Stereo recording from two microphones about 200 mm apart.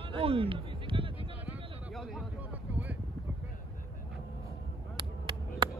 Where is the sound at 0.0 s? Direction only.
30° right (ahead or behind).